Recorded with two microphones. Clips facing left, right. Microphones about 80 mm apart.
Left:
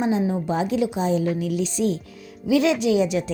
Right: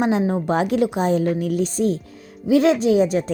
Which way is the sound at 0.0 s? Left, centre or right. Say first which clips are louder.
Right 3 dB; right.